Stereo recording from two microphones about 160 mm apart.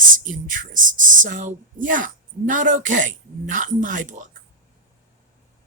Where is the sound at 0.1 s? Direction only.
55° right (ahead or behind).